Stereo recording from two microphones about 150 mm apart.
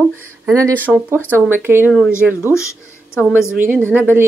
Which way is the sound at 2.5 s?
20° left (ahead or behind).